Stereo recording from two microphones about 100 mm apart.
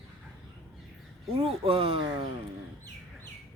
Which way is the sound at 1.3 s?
70° right (ahead or behind).